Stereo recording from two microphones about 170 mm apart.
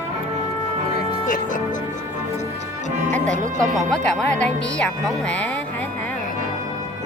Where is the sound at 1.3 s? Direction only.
50° left (ahead or behind).